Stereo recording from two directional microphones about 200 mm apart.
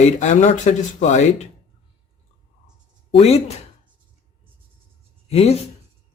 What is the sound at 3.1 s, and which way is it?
Speech, 30° left (ahead or behind).